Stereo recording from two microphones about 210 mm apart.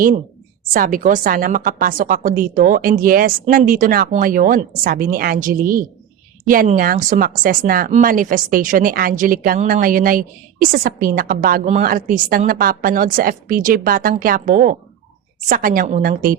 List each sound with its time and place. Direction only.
0.7 s a woman's voice: 40° right (ahead or behind)